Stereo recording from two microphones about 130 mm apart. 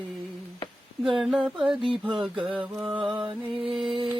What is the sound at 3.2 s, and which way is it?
Music, 40° right (ahead or behind).